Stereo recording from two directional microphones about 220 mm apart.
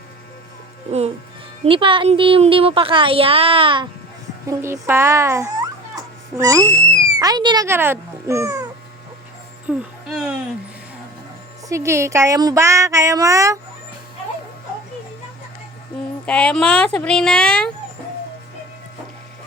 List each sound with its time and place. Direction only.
1.6 s a woman's voice: 25° right (ahead or behind)
4.4 s a child's voice: 10° right (ahead or behind)
9.6 s a sound: 5° right (ahead or behind)
11.7 s speech: 15° right (ahead or behind)
16.2 s speech: 5° left (ahead or behind)